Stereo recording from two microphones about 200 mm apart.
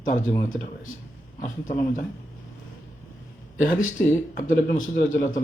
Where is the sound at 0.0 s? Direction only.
40° left (ahead or behind).